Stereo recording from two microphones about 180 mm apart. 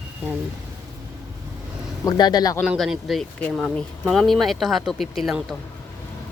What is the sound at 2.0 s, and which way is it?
Speech, 20° left (ahead or behind).